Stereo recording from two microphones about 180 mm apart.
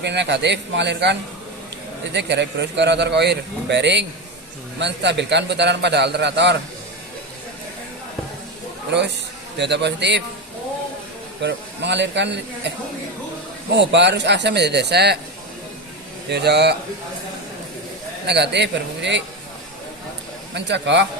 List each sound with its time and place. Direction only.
0.0 s a man's voice: 70° right (ahead or behind)
2.1 s a man's voice: 70° right (ahead or behind)
9.6 s a man's voice: 70° right (ahead or behind)
11.4 s a man's voice: 75° right (ahead or behind)
13.7 s a man's voice: 75° right (ahead or behind)
16.3 s a man's voice: 65° right (ahead or behind)
18.3 s a man's voice: 70° right (ahead or behind)
20.5 s a man's voice: 75° right (ahead or behind)